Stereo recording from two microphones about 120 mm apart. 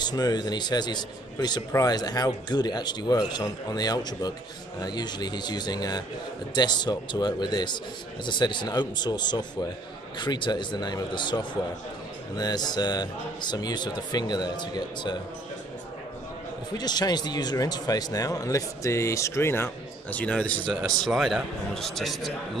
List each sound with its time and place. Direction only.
0.0 s speech: 35° left (ahead or behind)
16.7 s speech: 35° left (ahead or behind); by 20.6 s 10° left (ahead or behind)
20.6 s a man's voice: 5° right (ahead or behind)